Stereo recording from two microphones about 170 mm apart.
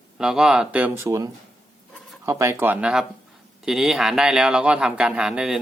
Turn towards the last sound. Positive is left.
turn(degrees=-5)  # may be behind; listen again after turning